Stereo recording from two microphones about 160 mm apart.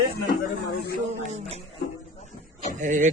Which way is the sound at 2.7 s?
50° right (ahead or behind).